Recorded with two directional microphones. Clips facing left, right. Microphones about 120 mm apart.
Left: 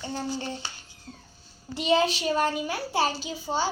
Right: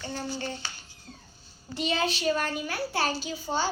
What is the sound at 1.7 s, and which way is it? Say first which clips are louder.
A child's voice: left 5 dB; 20° left (ahead or behind).